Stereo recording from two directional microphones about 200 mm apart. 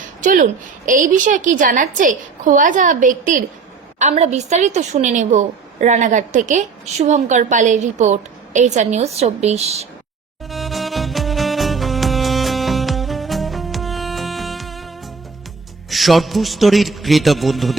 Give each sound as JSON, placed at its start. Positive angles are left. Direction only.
{"t": 0.2, "sound": "a woman's voice", "side_deg": -40}
{"t": 10.5, "sound": "music", "side_deg": 0}
{"t": 15.9, "sound": "a man's voice", "side_deg": 0}